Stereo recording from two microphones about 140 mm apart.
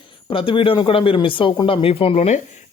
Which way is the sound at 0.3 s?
40° left (ahead or behind).